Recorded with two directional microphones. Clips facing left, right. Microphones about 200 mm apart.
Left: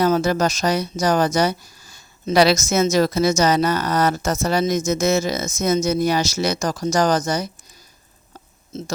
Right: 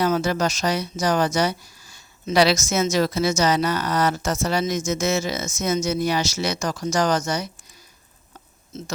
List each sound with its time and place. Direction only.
0.0 s a woman's voice: 40° left (ahead or behind)